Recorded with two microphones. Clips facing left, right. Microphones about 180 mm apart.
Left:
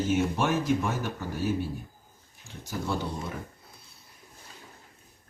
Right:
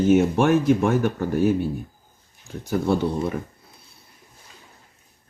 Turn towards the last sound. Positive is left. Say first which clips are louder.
# right 10 dB
turn(degrees=-60)  # may be behind; listen again after turning